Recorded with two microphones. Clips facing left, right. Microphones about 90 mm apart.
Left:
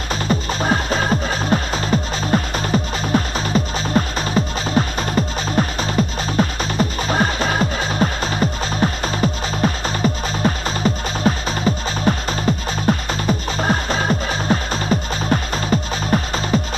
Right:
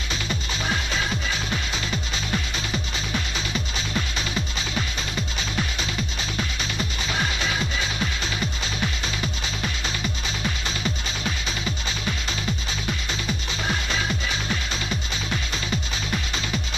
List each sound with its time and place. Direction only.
0.1 s music: 40° left (ahead or behind)